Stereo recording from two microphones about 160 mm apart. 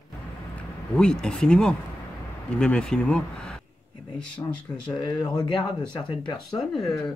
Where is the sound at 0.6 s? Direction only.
5° left (ahead or behind).